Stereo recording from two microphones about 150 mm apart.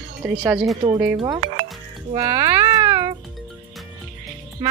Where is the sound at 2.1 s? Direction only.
25° right (ahead or behind).